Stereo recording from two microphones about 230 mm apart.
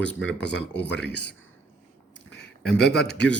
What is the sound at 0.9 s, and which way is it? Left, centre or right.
Speech, left.